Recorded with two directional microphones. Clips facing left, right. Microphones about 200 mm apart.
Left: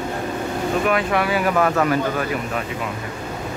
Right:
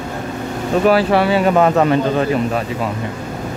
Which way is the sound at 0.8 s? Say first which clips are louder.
Right 9 dB; 35° right (ahead or behind).